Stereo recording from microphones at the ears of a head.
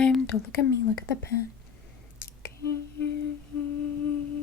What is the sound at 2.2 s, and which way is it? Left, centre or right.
Humming, left.